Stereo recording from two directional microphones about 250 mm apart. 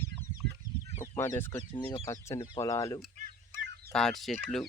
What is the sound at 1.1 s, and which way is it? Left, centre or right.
Fowl, centre.